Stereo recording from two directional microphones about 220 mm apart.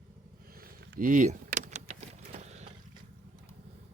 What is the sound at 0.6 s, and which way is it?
Vehicle, 40° right (ahead or behind).